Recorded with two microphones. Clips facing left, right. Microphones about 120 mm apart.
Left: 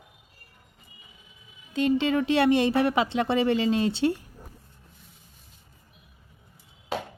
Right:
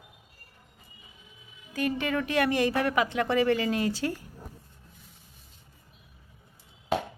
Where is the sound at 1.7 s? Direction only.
25° left (ahead or behind).